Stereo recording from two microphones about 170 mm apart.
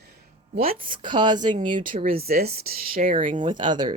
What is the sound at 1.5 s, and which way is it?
Speech, 50° right (ahead or behind).